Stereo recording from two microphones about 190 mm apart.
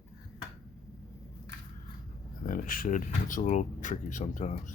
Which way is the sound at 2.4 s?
45° left (ahead or behind).